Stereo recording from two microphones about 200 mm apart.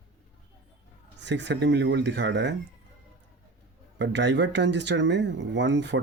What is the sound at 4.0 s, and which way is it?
Speech, 60° right (ahead or behind).